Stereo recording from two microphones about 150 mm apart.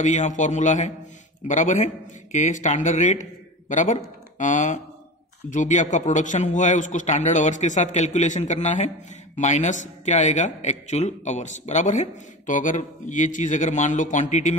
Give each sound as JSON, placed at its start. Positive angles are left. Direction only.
{"t": 0.0, "sound": "a man's voice", "side_deg": 55}